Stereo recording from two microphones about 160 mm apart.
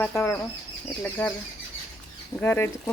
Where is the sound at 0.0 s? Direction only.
15° left (ahead or behind).